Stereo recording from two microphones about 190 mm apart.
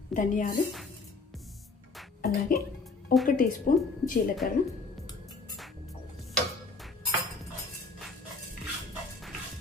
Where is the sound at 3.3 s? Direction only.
45° left (ahead or behind).